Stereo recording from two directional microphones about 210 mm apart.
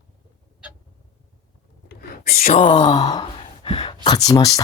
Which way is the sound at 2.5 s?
20° left (ahead or behind).